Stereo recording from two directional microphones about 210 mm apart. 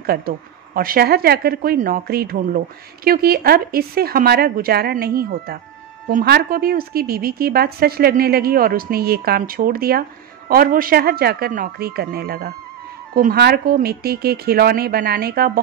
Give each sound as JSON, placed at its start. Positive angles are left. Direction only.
{"t": 0.0, "sound": "a woman's voice", "side_deg": -45}